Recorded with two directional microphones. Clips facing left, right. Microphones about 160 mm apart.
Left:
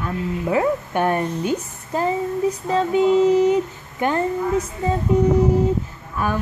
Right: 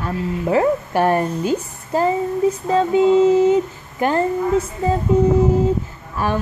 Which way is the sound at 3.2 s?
25° right (ahead or behind).